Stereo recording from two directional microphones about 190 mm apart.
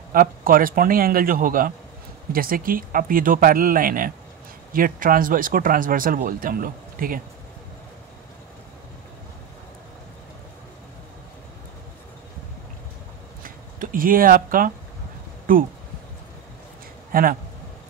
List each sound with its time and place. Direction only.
0.1 s speech: 50° right (ahead or behind)
13.4 s a sound: 45° right (ahead or behind)
15.5 s speech: 45° right (ahead or behind)
17.1 s speech: 50° right (ahead or behind)